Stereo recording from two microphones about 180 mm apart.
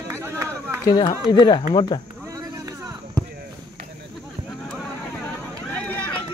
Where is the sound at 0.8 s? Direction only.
25° left (ahead or behind).